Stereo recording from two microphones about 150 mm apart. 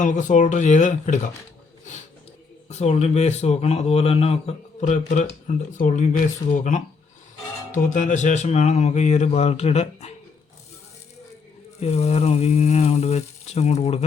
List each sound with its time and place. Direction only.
0.0 s speech: 55° left (ahead or behind)
2.6 s speech: 45° left (ahead or behind)
11.8 s speech: 45° left (ahead or behind)